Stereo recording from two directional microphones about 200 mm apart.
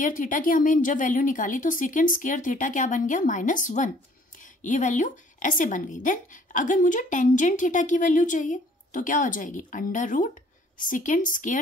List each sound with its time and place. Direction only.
0.0 s a woman's voice: 40° left (ahead or behind)